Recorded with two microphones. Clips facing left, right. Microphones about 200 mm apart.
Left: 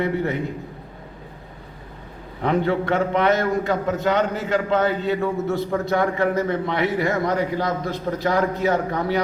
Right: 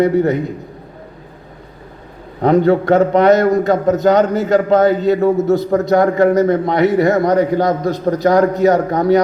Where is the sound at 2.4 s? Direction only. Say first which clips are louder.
Right 9 dB; 40° right (ahead or behind).